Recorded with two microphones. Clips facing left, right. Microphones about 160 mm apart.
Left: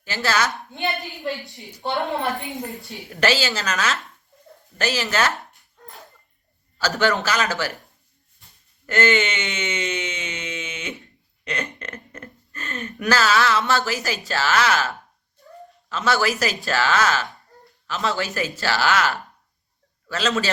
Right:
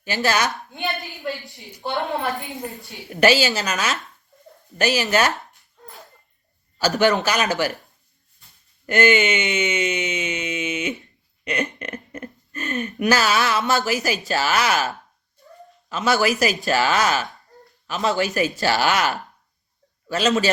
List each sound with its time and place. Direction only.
0.0 s speech: 15° right (ahead or behind)
1.5 s speech: centre (ahead or behind)
3.2 s speech: 15° right (ahead or behind)
6.7 s speech: 15° right (ahead or behind)
8.9 s a sound: 15° right (ahead or behind)
11.4 s speech: 15° right (ahead or behind)